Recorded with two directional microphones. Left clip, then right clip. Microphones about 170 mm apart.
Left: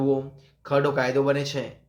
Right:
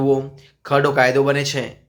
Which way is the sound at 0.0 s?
25° right (ahead or behind).